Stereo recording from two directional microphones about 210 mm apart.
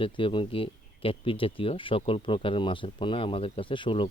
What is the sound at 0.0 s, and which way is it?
Speech, 25° left (ahead or behind).